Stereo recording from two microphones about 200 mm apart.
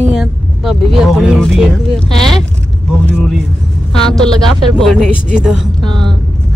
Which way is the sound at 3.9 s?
5° left (ahead or behind).